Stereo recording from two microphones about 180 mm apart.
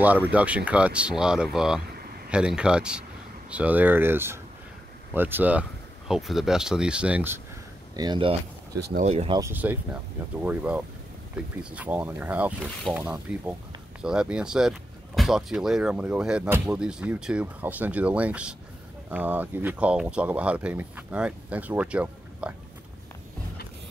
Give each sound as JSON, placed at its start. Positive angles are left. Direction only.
{"t": 0.3, "sound": "speech", "side_deg": -5}
{"t": 7.9, "sound": "speech", "side_deg": -25}
{"t": 9.4, "sound": "speech", "side_deg": -10}